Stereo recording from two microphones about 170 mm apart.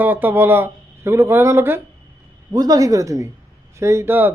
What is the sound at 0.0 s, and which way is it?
Speech, 10° right (ahead or behind).